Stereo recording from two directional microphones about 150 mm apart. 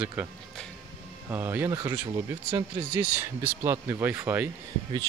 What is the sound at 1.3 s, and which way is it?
Speech, 15° right (ahead or behind).